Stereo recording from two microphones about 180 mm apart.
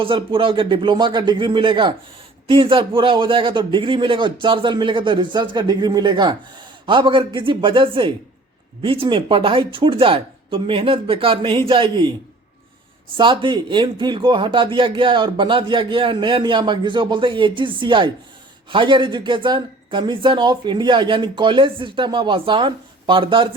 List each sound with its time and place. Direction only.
0.0 s speech: 30° right (ahead or behind)
13.1 s speech: 25° right (ahead or behind)